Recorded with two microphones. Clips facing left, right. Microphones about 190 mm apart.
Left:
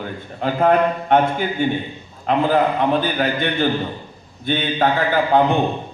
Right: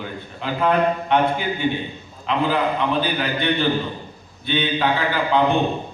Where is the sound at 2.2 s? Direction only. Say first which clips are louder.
Left 4 dB; 45° left (ahead or behind).